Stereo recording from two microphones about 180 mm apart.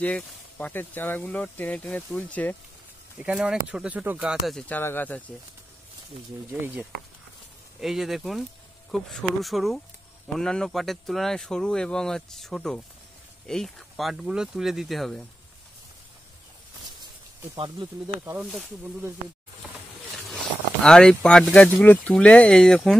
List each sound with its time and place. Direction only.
0.0 s speech: 10° left (ahead or behind)
3.2 s speech: 5° right (ahead or behind)
7.8 s speech: centre (ahead or behind)
17.6 s speech: 20° right (ahead or behind)
18.4 s speech: centre (ahead or behind)
20.2 s speech: centre (ahead or behind)